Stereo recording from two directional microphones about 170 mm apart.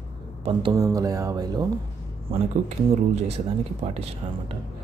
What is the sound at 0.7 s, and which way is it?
Speech, 20° right (ahead or behind).